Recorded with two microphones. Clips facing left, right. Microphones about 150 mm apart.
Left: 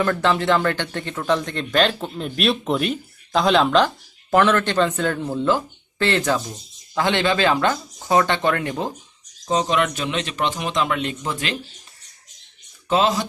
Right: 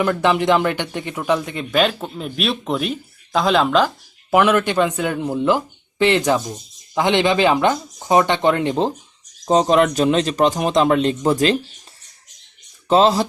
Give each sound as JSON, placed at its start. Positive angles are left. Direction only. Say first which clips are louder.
{"t": 0.0, "sound": "speech", "louder": "right 2 dB", "side_deg": -15}
{"t": 9.5, "sound": "speech", "louder": "right 6 dB", "side_deg": -35}
{"t": 12.9, "sound": "speech", "louder": "right 5 dB", "side_deg": -35}